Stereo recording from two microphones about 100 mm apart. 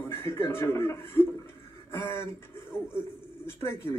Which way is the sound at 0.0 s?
25° left (ahead or behind).